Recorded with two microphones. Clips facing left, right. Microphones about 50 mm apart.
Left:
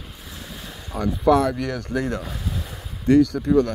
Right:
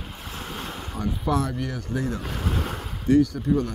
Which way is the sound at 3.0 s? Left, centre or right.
Left.